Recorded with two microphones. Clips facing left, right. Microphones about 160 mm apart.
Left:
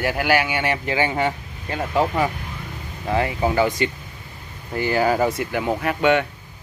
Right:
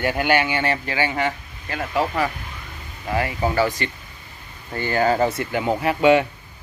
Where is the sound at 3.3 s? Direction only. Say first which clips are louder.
Even; 15° left (ahead or behind).